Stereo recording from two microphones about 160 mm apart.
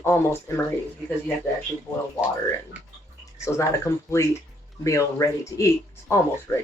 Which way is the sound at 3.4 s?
15° left (ahead or behind).